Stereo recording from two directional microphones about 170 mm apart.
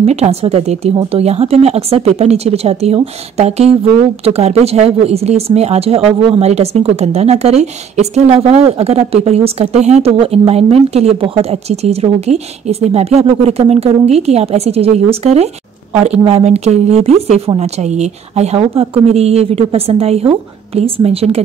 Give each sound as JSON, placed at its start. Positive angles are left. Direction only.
{"t": 0.0, "sound": "speech", "side_deg": -40}